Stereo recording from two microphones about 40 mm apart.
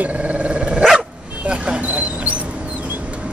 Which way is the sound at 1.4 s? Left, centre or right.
Right.